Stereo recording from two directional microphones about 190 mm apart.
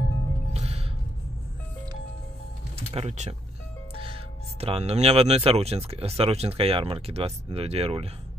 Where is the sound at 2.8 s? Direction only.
35° right (ahead or behind).